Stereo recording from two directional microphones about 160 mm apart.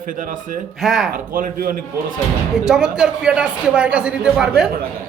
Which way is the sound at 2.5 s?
5° right (ahead or behind).